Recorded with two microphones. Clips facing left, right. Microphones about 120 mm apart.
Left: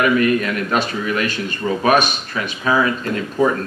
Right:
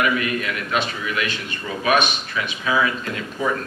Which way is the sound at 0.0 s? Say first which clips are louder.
Left 6 dB; 40° left (ahead or behind).